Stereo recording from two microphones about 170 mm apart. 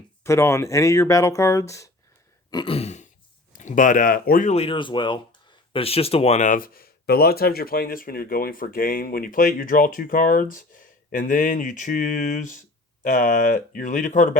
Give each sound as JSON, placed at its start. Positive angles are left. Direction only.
{"t": 0.3, "sound": "speech", "side_deg": 15}
{"t": 2.5, "sound": "throat clearing", "side_deg": 30}
{"t": 3.5, "sound": "speech", "side_deg": 50}
{"t": 4.5, "sound": "speech", "side_deg": 30}